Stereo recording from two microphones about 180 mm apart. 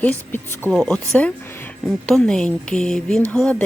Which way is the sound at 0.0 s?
10° left (ahead or behind).